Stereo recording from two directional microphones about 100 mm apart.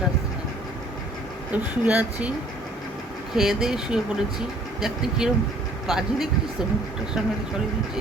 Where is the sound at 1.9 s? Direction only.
15° right (ahead or behind).